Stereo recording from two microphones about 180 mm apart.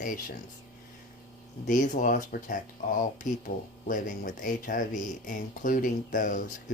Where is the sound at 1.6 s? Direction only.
45° left (ahead or behind).